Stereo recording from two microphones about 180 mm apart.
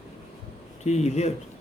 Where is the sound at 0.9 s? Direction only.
40° left (ahead or behind).